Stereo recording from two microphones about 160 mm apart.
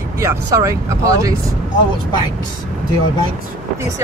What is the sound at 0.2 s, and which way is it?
Speech, 15° right (ahead or behind).